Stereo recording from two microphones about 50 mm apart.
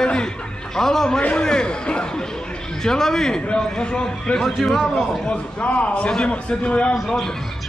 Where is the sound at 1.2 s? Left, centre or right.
Centre.